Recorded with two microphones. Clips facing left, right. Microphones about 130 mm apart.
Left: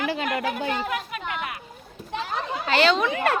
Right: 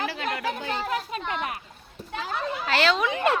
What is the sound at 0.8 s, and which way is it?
Speech, 30° right (ahead or behind).